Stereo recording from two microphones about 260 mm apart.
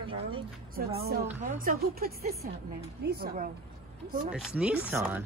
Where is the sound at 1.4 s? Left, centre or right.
Right.